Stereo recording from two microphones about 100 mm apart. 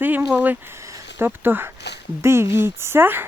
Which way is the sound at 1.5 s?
20° right (ahead or behind).